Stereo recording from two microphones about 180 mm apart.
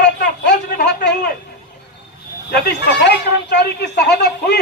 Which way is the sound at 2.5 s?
65° left (ahead or behind).